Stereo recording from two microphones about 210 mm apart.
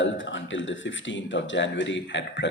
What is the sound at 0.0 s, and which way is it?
Speech, 65° left (ahead or behind).